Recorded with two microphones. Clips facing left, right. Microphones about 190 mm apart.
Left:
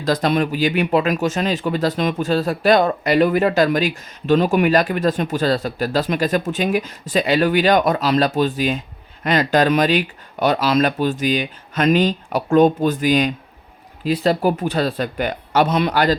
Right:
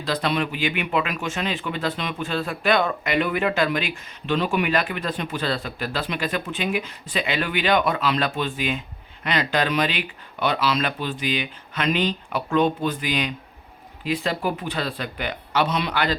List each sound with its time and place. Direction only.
0.0 s speech: 45° left (ahead or behind)